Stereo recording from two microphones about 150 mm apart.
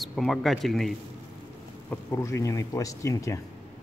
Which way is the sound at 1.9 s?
20° left (ahead or behind).